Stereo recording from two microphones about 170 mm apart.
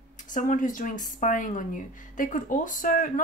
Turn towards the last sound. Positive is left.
turn(degrees=55)  # may be behind; listen again after turning